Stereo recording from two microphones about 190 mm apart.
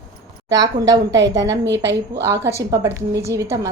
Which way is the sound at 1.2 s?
70° right (ahead or behind).